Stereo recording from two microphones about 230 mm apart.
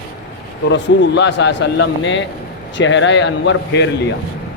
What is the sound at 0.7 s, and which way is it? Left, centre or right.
Speech, left.